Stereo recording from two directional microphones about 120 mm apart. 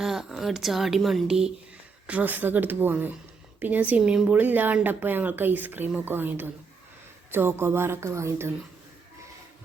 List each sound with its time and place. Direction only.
0.0 s speech: 5° right (ahead or behind); by 8.5 s 20° right (ahead or behind)